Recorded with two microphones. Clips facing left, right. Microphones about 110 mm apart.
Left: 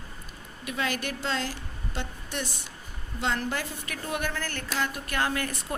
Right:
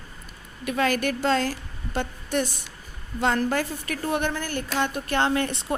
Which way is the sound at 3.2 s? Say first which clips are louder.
Right 6 dB; 50° right (ahead or behind).